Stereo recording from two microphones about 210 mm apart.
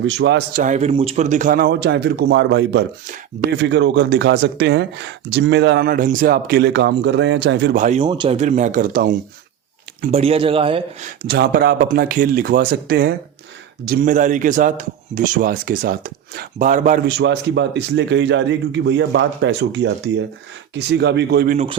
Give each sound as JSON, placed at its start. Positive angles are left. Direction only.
{"t": 0.0, "sound": "speech", "side_deg": -60}
{"t": 0.5, "sound": "speech", "side_deg": -35}
{"t": 8.0, "sound": "a man's voice", "side_deg": -25}
{"t": 10.1, "sound": "speech", "side_deg": -30}
{"t": 11.2, "sound": "a man's voice", "side_deg": -45}
{"t": 17.1, "sound": "speech", "side_deg": -55}